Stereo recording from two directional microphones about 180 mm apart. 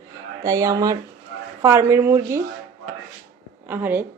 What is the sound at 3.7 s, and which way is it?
Speech, 10° right (ahead or behind).